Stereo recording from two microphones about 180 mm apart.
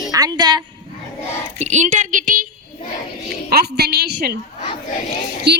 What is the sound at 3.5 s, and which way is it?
Speech, 60° right (ahead or behind).